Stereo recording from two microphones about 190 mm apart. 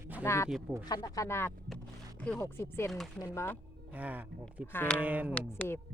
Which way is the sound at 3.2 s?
15° left (ahead or behind).